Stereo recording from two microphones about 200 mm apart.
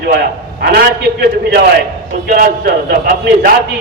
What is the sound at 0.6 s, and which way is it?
A man's voice, 55° right (ahead or behind).